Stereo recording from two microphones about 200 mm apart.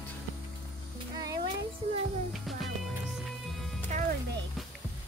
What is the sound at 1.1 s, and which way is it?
Music, 20° right (ahead or behind).